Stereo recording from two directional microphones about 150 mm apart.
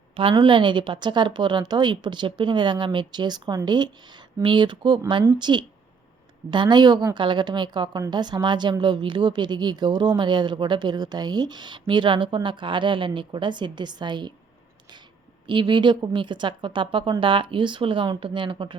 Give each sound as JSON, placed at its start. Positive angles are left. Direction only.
{"t": 0.2, "sound": "a woman's voice", "side_deg": -35}
{"t": 15.4, "sound": "a woman's voice", "side_deg": -30}